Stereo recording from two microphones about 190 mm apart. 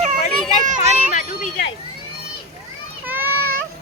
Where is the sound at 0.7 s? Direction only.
40° left (ahead or behind).